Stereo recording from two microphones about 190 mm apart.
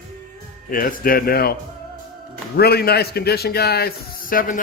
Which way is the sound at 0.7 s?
50° left (ahead or behind).